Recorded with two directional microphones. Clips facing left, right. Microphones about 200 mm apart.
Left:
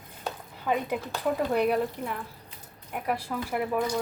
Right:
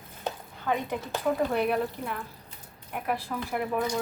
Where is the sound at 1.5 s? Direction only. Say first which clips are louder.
Left 2 dB; centre (ahead or behind).